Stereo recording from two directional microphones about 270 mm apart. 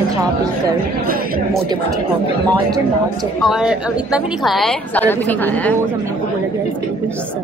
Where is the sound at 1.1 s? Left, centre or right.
Right.